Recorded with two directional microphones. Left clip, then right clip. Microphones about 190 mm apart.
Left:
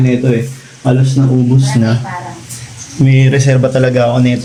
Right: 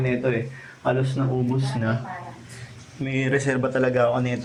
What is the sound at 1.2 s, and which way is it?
Speech, 15° left (ahead or behind).